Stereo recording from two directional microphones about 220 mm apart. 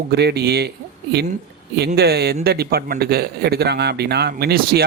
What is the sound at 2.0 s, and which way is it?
A man's voice, 45° right (ahead or behind).